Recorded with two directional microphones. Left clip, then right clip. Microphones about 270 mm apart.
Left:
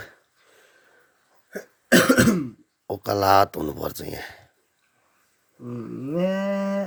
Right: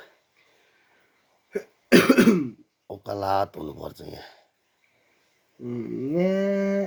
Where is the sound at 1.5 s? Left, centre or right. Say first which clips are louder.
Even; left.